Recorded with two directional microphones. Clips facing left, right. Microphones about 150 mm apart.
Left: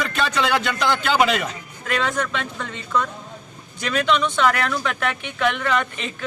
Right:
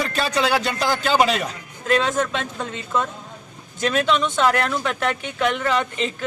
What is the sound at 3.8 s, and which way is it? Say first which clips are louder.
Speech: right 1 dB; 40° right (ahead or behind).